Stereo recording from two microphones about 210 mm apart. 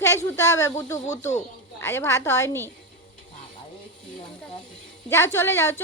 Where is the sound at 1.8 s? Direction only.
10° left (ahead or behind).